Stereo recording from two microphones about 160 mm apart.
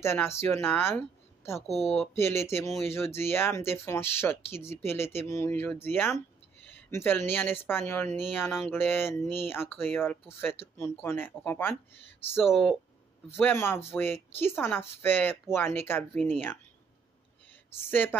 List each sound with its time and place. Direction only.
0.0 s a woman's voice: 15° left (ahead or behind)
1.7 s speech: centre (ahead or behind)
2.1 s speech: 15° left (ahead or behind)
13.4 s speech: 15° left (ahead or behind)
17.7 s speech: 15° left (ahead or behind)